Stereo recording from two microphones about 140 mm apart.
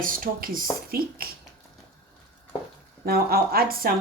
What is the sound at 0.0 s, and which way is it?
Speech, 85° right.